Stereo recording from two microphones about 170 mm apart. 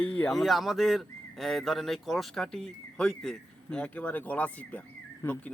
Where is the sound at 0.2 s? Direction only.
Centre (ahead or behind).